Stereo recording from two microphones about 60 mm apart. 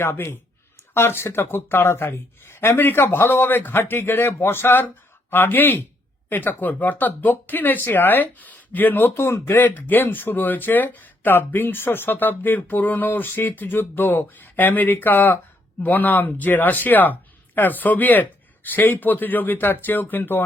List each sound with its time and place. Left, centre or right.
0.0 s speech: left
9.1 s speech: left